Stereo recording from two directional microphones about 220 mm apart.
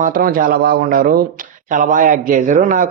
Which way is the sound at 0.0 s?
40° right (ahead or behind).